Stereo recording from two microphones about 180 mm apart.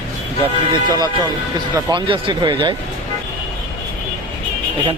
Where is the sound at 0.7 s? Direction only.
25° right (ahead or behind).